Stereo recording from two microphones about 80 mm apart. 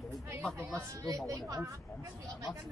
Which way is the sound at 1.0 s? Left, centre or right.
Right.